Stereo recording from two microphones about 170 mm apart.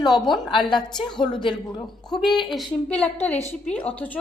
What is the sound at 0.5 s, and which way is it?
A woman's voice, 25° left (ahead or behind).